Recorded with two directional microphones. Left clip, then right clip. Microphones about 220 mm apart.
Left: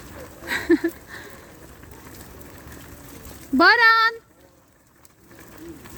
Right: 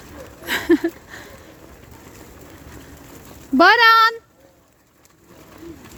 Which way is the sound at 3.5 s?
15° right (ahead or behind).